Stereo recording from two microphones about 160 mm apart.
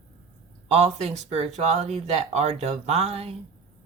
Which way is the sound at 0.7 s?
40° right (ahead or behind).